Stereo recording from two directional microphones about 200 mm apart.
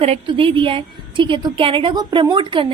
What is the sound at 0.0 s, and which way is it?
A woman's voice, 30° right (ahead or behind).